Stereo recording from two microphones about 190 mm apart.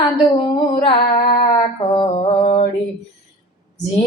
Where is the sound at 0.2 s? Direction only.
25° left (ahead or behind).